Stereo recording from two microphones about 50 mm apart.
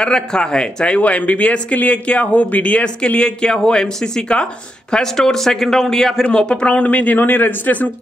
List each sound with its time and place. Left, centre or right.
0.0 s speech: centre; by 7.9 s left